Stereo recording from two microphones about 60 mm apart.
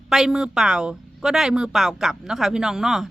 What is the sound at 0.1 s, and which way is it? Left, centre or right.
Speech, centre.